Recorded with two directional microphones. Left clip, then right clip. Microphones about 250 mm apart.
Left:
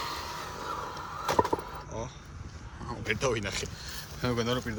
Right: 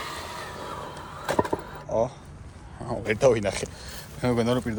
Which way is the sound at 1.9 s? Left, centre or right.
Centre.